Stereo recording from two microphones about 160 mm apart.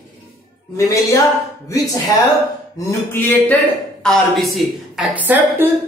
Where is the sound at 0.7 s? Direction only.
20° left (ahead or behind).